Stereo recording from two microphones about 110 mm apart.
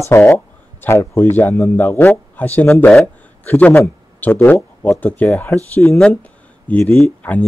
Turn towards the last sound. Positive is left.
turn(degrees=15)  # may be behind; listen again after turning